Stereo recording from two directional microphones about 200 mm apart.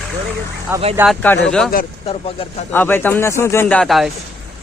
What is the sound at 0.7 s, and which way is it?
Speech, 10° right (ahead or behind).